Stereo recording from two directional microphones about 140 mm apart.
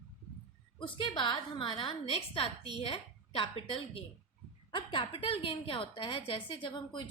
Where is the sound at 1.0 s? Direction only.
35° left (ahead or behind).